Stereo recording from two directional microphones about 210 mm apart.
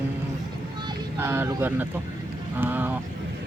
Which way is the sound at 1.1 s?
10° right (ahead or behind).